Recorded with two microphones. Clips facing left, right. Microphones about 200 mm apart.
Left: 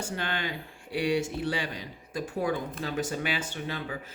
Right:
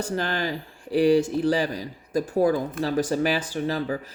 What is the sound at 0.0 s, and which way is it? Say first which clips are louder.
Speech: right 6 dB; 40° right (ahead or behind).